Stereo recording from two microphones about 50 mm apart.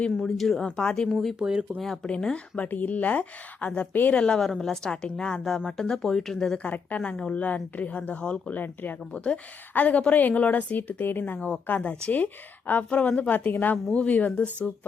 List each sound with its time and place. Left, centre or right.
0.2 s speech: centre
0.6 s speech: centre
1.0 s speech: centre
1.4 s speech: centre
2.0 s a woman's voice: left
2.6 s a woman's voice: left; by 6.6 s centre
6.6 s a woman's voice: left
8.5 s a woman's voice: left